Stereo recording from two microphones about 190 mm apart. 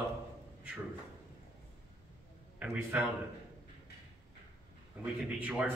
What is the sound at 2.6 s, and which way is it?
Speech, 5° right (ahead or behind).